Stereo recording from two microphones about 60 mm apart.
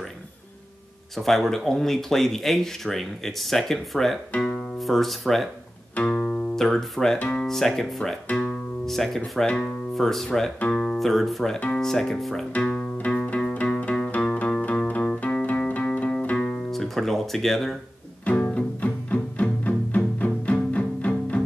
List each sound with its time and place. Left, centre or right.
1.1 s speech: centre
5.9 s music: centre
6.6 s speech: centre
7.2 s speech: left
7.4 s speech: centre
10.7 s music: centre
11.0 s speech: centre
12.9 s music: left
16.3 s music: centre
18.2 s music: centre